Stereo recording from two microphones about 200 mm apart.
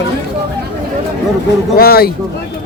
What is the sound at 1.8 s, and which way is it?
Speech, 50° left (ahead or behind).